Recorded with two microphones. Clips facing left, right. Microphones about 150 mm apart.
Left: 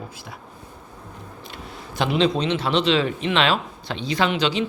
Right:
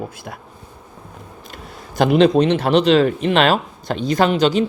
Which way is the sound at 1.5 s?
45° right (ahead or behind).